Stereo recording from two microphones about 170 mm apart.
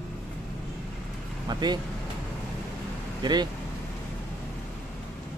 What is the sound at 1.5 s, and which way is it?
Speech, 25° right (ahead or behind).